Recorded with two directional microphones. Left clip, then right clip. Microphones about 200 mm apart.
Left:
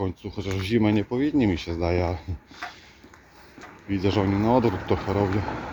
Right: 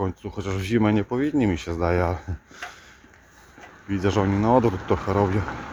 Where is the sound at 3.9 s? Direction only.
10° right (ahead or behind).